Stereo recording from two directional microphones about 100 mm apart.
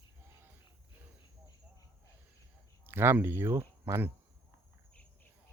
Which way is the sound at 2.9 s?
25° right (ahead or behind).